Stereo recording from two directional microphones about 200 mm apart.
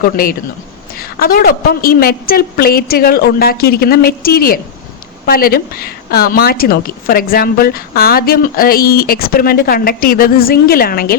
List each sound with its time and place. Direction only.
0.0 s a woman's voice: 45° left (ahead or behind)